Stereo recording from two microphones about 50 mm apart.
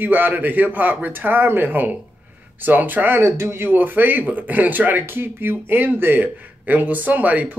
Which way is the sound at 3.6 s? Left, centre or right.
Right.